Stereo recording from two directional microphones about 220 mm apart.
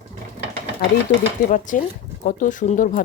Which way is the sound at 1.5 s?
35° left (ahead or behind).